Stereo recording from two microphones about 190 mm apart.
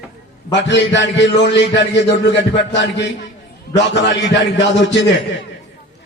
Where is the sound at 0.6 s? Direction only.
65° left (ahead or behind).